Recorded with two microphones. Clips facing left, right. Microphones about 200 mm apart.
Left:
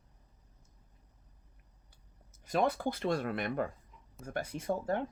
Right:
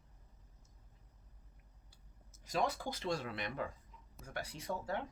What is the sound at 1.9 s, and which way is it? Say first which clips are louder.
Speech: left 2 dB; 55° left (ahead or behind).